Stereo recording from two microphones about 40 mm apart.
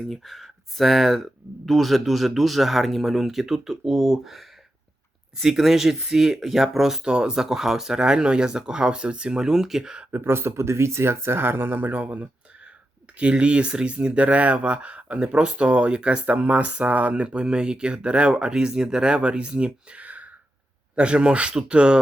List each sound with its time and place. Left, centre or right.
0.1 s speech: centre
7.0 s speech: right
7.3 s speech: centre
9.5 s speech: centre
10.1 s speech: right
11.9 s speech: right
13.1 s speech: right
20.9 s speech: right